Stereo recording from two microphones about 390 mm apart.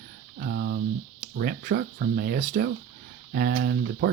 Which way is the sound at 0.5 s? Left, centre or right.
Right.